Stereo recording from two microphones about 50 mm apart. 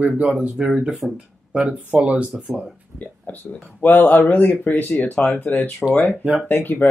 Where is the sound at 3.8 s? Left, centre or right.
Left.